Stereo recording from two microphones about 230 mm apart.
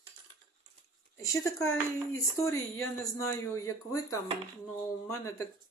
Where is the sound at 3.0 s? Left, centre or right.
Centre.